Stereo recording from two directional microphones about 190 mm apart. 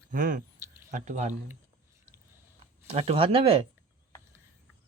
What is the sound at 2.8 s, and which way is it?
Speech, 35° right (ahead or behind).